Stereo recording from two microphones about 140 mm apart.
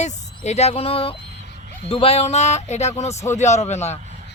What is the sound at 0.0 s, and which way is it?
Speech, 55° left (ahead or behind).